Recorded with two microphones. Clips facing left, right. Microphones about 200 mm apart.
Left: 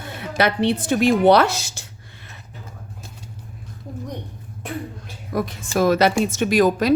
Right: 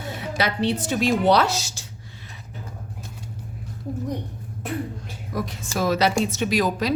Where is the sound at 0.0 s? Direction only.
55° left (ahead or behind).